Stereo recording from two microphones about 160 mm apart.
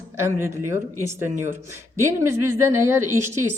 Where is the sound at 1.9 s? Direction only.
15° right (ahead or behind).